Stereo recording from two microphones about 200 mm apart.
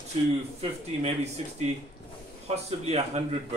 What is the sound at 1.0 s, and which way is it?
Speech, 35° right (ahead or behind).